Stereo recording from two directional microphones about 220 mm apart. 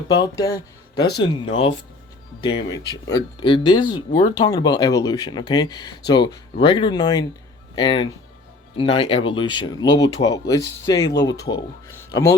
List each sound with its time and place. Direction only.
0.2 s speech: 15° left (ahead or behind)
0.5 s speech: 45° left (ahead or behind)
2.4 s speech: 20° left (ahead or behind)